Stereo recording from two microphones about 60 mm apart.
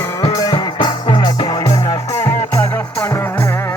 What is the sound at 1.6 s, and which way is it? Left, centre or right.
Music, left.